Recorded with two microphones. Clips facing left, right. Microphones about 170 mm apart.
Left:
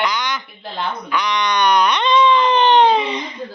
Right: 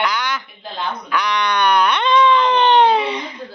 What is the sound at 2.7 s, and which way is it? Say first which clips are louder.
Baby cry: even; 10° right (ahead or behind).